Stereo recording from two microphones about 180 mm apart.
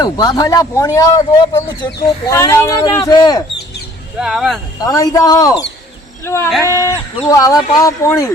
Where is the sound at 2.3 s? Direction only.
15° left (ahead or behind).